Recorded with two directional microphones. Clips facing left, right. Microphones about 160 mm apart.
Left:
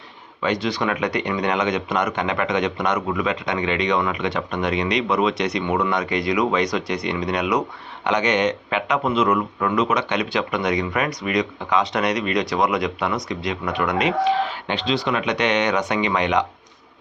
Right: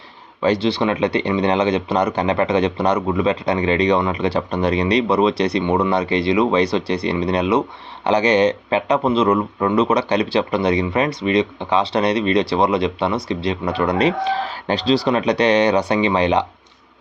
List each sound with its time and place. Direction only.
0.4 s speech: 30° right (ahead or behind)